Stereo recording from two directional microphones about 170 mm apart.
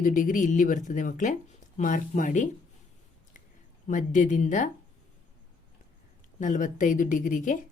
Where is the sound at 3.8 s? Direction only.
50° left (ahead or behind).